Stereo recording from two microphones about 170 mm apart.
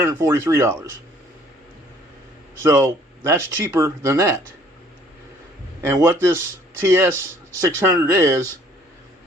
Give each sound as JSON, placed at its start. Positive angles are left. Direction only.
{"t": 0.0, "sound": "speech", "side_deg": -15}
{"t": 2.6, "sound": "speech", "side_deg": -15}
{"t": 5.8, "sound": "speech", "side_deg": -15}